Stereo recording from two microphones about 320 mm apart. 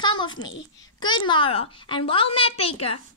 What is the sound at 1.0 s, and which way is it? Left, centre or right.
A woman's voice, centre.